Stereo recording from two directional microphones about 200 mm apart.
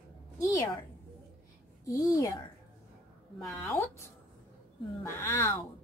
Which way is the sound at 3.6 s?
10° left (ahead or behind).